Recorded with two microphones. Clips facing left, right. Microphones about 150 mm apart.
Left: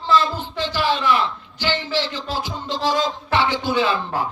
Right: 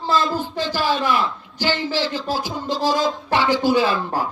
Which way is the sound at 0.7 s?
45° right (ahead or behind).